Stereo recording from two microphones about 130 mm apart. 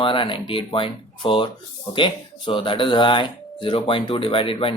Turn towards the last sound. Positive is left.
turn(degrees=45)  # may be behind; listen again after turning